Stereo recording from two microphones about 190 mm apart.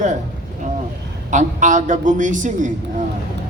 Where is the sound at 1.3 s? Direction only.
40° right (ahead or behind).